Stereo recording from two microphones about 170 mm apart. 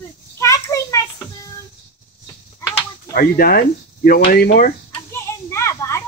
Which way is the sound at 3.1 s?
60° left (ahead or behind).